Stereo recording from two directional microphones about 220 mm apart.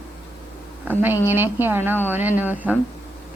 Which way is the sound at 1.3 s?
10° right (ahead or behind).